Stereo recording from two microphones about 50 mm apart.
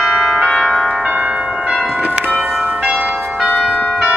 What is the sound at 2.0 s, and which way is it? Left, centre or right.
Church bell, right.